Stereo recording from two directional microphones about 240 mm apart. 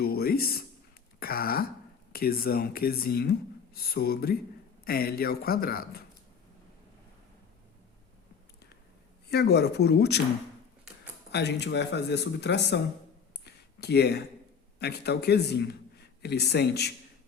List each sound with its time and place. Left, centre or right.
0.0 s speech: left
9.3 s speech: left
11.3 s speech: left
13.4 s a sound: left
14.8 s a man's voice: left